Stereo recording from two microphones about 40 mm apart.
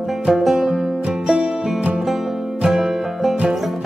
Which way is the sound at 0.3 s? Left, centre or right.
Centre.